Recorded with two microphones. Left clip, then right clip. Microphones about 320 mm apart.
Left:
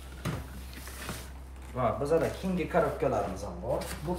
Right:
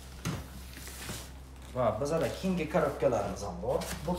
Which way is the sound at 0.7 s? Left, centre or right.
Centre.